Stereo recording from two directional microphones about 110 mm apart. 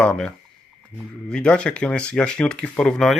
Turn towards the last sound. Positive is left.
turn(degrees=5)  # may be behind; listen again after turning